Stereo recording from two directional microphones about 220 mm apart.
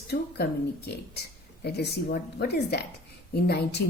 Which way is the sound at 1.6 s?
45° left (ahead or behind).